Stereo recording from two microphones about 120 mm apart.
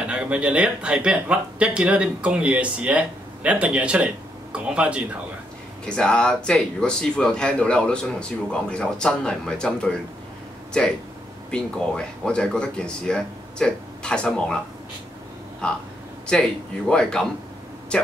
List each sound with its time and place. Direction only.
0.1 s speech: 10° right (ahead or behind)
5.9 s speech: 10° left (ahead or behind)
11.5 s speech: 5° left (ahead or behind)
15.6 s speech: 10° left (ahead or behind)